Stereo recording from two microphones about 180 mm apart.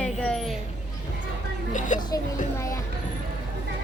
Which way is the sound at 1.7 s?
45° left (ahead or behind).